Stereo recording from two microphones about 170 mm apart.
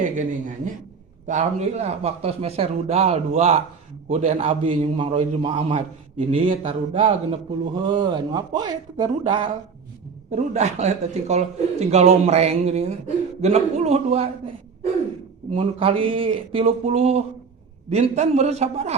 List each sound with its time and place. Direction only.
0.0 s a man's voice: 50° right (ahead or behind); by 9.5 s 30° right (ahead or behind)
10.3 s a man's voice: 40° right (ahead or behind)
15.5 s a man's voice: 35° right (ahead or behind)